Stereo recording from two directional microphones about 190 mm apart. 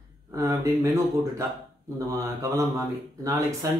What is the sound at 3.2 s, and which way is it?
Speech, 20° right (ahead or behind).